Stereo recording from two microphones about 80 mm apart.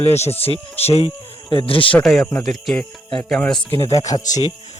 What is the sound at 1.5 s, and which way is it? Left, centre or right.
Speech, left.